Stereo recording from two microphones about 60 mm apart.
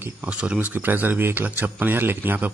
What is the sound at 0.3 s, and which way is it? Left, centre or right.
Speech, right.